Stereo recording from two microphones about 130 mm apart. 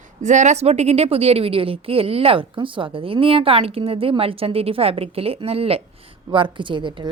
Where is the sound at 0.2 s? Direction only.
65° right (ahead or behind).